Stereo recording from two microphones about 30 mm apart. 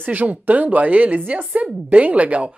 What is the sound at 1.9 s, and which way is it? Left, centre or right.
Speech, right.